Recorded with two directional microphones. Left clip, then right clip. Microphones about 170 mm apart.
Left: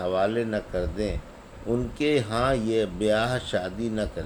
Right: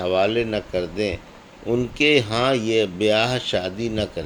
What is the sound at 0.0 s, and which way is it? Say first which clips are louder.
Speech: right 5 dB; 25° right (ahead or behind).